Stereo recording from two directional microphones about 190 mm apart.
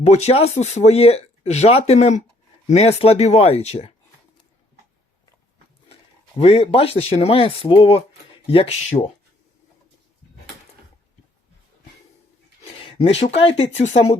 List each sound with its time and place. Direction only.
0.0 s speech: 35° left (ahead or behind)
5.9 s speech: 30° left (ahead or behind)
12.8 s a sound: 30° left (ahead or behind)
13.3 s speech: 30° left (ahead or behind)